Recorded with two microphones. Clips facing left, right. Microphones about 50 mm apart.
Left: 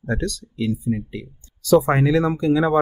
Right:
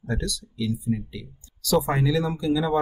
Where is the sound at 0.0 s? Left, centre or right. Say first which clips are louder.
Left 5 dB; left.